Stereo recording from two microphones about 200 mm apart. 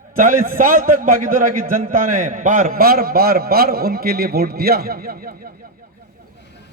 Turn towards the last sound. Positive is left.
turn(degrees=-45)  # may be behind; listen again after turning